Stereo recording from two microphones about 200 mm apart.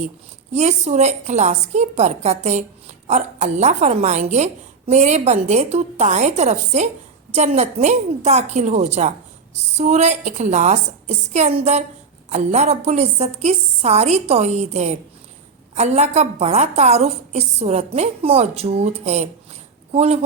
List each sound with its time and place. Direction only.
0.5 s a woman's voice: 35° right (ahead or behind)